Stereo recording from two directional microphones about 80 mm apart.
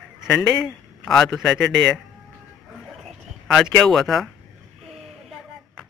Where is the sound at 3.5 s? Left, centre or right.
Centre.